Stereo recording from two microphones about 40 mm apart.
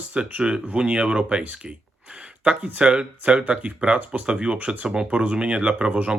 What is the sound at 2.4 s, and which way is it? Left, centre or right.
Speech, right.